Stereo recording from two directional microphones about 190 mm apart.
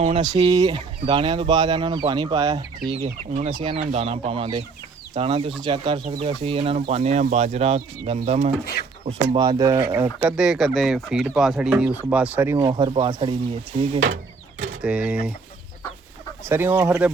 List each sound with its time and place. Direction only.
0.0 s speech: 30° right (ahead or behind)
0.5 s speech: 20° right (ahead or behind)
2.9 s speech: 35° right (ahead or behind)
9.3 s speech: 20° right (ahead or behind)
12.5 s speech: 20° right (ahead or behind)
13.9 s speech: 40° right (ahead or behind)
14.8 s speech: 5° right (ahead or behind)
16.5 s speech: 10° right (ahead or behind)